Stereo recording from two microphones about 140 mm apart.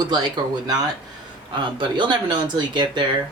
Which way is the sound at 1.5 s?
35° right (ahead or behind).